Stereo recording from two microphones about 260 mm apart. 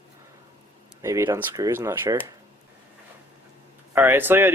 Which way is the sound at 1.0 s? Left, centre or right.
Centre.